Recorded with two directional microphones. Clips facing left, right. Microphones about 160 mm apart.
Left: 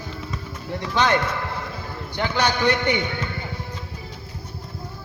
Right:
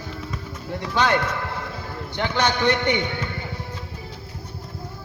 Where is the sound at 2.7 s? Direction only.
25° right (ahead or behind).